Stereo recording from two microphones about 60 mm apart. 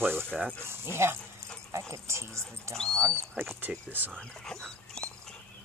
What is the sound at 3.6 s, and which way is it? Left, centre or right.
Speech, right.